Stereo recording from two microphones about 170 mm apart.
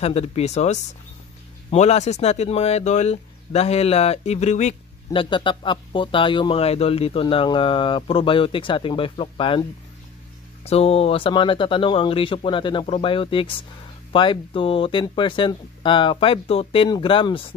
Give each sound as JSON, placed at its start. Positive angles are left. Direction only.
{"t": 0.0, "sound": "speech", "side_deg": 35}